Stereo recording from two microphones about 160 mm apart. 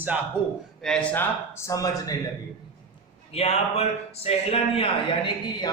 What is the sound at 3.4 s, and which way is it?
Speech, 40° left (ahead or behind).